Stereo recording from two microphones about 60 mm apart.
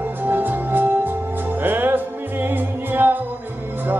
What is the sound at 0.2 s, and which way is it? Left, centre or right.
Music, right.